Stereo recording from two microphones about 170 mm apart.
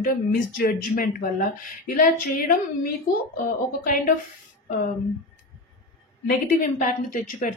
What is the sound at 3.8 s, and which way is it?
Speech, 50° left (ahead or behind).